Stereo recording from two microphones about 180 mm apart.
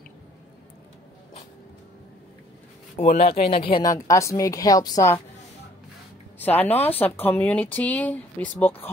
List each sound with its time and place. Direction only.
3.0 s speech: 35° left (ahead or behind); by 5.2 s 20° left (ahead or behind)
6.3 s a sound: 10° left (ahead or behind)
6.8 s speech: 10° left (ahead or behind)